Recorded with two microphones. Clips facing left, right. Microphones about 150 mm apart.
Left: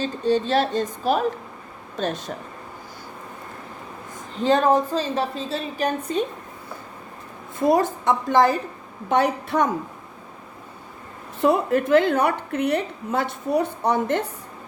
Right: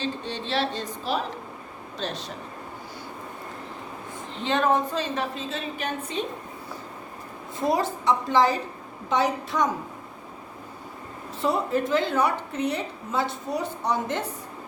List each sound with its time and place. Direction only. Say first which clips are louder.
0.0 s a woman's voice: left 9 dB; 45° left (ahead or behind)
4.4 s a woman's voice: left 5 dB; 35° left (ahead or behind)
7.6 s a woman's voice: left 5 dB; 50° left (ahead or behind)
11.3 s a woman's voice: left 5 dB; 60° left (ahead or behind)